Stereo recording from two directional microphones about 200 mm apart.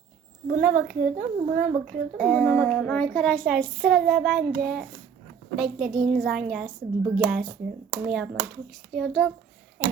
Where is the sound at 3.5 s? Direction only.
50° right (ahead or behind).